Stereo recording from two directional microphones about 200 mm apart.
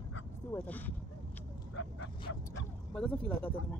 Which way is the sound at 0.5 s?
5° left (ahead or behind).